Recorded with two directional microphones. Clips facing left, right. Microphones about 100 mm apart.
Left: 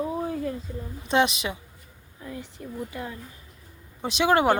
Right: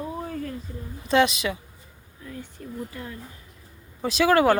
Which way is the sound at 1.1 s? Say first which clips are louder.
Right 2 dB; 25° left (ahead or behind).